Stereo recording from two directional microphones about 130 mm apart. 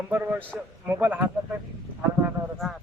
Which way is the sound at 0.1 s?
15° right (ahead or behind).